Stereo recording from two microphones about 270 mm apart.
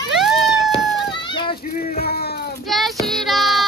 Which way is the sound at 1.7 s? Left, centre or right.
Left.